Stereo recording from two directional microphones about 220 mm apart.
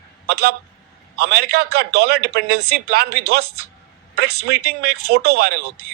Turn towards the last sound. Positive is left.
turn(degrees=-45)  # may be behind; listen again after turning